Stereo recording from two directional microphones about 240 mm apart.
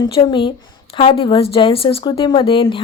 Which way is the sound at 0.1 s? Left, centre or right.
Left.